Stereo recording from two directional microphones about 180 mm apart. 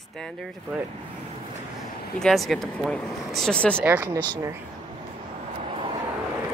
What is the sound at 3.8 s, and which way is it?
Speech, 10° right (ahead or behind).